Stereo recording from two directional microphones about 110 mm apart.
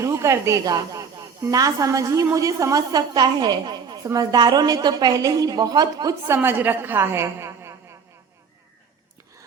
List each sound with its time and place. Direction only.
0.0 s a woman's voice: 30° right (ahead or behind)